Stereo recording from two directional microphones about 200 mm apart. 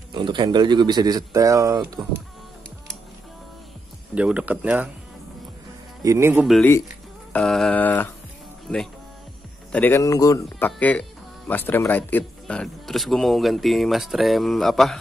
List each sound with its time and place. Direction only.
0.1 s speech: 25° right (ahead or behind)
4.1 s speech: 5° right (ahead or behind)
6.0 s speech: 15° right (ahead or behind)
6.4 s speech: centre (ahead or behind)
7.3 s mantra: centre (ahead or behind)
9.7 s mantra: 10° left (ahead or behind)
10.4 s speech: 10° left (ahead or behind)